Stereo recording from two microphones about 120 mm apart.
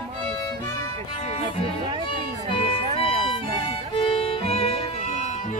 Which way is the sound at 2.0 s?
45° left (ahead or behind).